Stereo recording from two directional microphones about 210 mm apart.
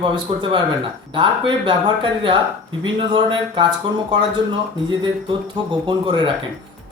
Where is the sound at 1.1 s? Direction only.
25° right (ahead or behind).